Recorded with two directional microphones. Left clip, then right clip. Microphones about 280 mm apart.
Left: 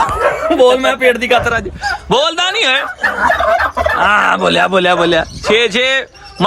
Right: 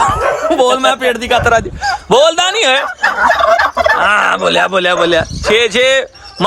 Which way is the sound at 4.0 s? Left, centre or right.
Centre.